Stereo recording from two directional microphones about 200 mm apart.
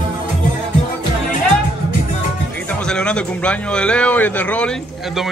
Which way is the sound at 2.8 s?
5° left (ahead or behind).